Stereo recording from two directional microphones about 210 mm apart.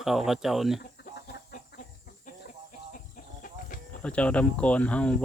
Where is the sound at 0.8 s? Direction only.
50° left (ahead or behind).